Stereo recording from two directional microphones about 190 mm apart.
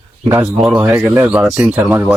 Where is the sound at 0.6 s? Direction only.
10° right (ahead or behind).